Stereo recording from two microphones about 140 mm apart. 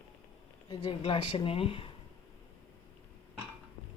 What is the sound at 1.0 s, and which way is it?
Speech, 40° left (ahead or behind).